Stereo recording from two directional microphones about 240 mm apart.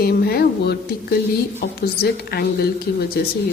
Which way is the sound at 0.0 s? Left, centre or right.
Left.